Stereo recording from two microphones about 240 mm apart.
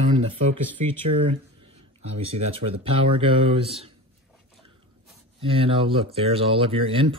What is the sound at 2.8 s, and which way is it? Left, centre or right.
Speech, right.